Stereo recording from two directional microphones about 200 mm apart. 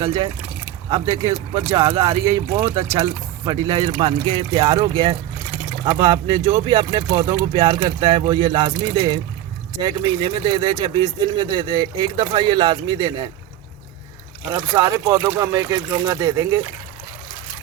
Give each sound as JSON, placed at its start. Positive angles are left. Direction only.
{"t": 0.9, "sound": "speech", "side_deg": -25}
{"t": 14.5, "sound": "speech", "side_deg": -20}